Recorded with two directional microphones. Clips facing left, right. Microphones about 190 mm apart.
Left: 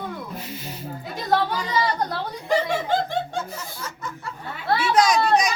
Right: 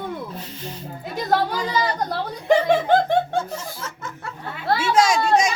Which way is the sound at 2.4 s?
60° right (ahead or behind).